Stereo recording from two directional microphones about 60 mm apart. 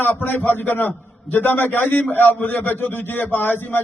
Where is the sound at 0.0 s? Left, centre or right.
Left.